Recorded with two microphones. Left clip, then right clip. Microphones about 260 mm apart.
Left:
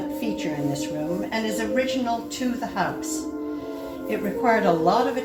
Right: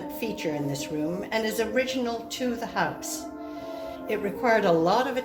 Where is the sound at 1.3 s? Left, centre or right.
Right.